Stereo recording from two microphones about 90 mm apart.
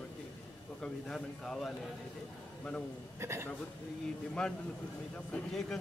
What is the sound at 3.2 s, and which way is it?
Speech, 30° right (ahead or behind).